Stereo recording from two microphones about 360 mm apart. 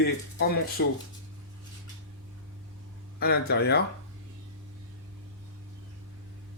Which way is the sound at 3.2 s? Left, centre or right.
Left.